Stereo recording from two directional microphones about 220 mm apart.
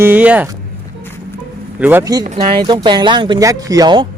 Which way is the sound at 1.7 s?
10° right (ahead or behind).